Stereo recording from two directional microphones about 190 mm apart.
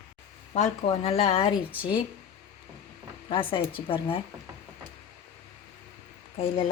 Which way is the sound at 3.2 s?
25° left (ahead or behind).